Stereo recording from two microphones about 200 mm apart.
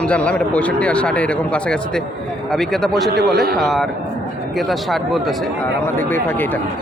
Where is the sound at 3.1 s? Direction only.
50° right (ahead or behind).